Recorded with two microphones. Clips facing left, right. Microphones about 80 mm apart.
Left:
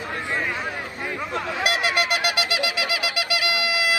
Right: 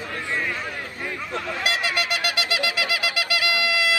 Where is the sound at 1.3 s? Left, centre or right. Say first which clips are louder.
Left 2 dB; centre.